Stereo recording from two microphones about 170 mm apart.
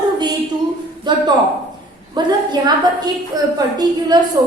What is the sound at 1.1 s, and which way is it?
A woman's voice, 25° right (ahead or behind).